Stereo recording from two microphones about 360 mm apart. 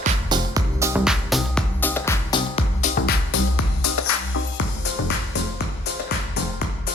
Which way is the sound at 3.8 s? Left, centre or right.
Left.